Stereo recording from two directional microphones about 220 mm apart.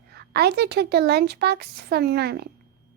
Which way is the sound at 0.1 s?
50° right (ahead or behind).